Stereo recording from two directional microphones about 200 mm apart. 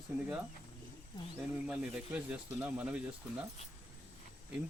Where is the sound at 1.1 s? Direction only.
20° left (ahead or behind).